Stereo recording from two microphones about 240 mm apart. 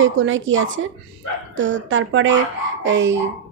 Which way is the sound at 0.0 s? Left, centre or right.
Right.